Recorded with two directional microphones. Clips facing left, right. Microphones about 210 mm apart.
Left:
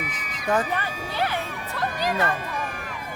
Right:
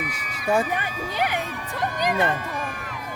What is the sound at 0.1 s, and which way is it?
Speech, 10° right (ahead or behind).